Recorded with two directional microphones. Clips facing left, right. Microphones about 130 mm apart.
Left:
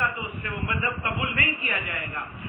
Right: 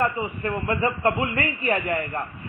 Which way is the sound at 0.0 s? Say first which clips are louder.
Right 6 dB; 40° right (ahead or behind).